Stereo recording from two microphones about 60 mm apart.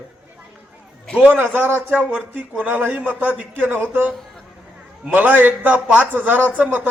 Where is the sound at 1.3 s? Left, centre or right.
Right.